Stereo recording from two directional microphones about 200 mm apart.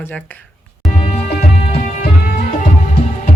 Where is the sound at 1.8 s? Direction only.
40° left (ahead or behind).